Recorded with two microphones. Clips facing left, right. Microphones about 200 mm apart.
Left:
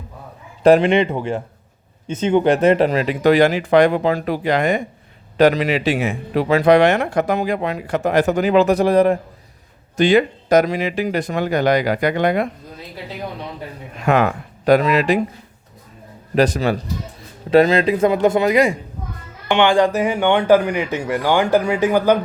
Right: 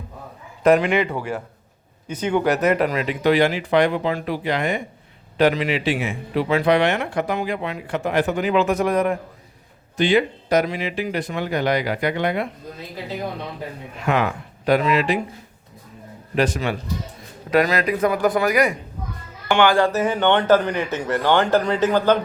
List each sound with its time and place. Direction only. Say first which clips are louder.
0.6 s a man's voice: left 4 dB; 30° left (ahead or behind)
10.0 s speech: left 4 dB; 45° left (ahead or behind)
14.1 s speech: left 5 dB; 45° left (ahead or behind)
16.3 s a man's voice: left 5 dB; 40° left (ahead or behind)
17.5 s a man's voice: left 6 dB; 25° left (ahead or behind); by 22.2 s 10° left (ahead or behind)